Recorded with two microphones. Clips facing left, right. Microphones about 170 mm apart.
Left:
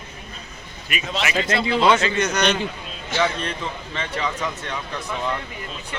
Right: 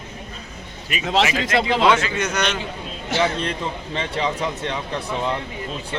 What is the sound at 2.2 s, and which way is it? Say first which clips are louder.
Speech: left 2 dB; 5° right (ahead or behind).